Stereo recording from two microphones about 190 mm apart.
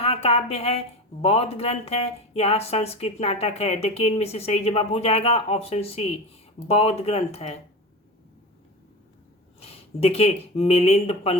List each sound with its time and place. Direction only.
0.0 s speech: 30° left (ahead or behind)
9.6 s speech: 30° left (ahead or behind)